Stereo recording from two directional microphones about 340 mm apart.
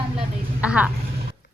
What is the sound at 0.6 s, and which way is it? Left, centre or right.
Speech, centre.